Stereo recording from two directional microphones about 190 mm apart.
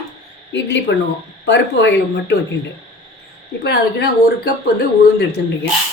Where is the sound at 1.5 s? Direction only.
65° left (ahead or behind).